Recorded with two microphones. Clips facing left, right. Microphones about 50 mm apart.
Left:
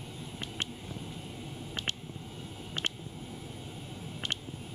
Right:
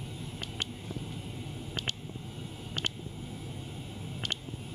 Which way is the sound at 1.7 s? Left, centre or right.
Left.